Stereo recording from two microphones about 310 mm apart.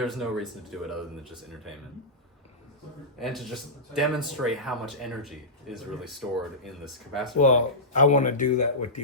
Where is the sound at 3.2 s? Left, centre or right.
Centre.